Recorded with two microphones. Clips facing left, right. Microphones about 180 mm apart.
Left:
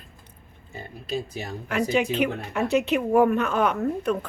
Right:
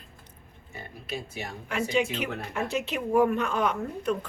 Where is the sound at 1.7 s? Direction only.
60° left (ahead or behind).